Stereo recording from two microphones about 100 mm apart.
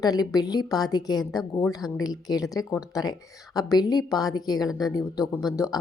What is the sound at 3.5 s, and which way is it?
A woman's voice, 40° left (ahead or behind).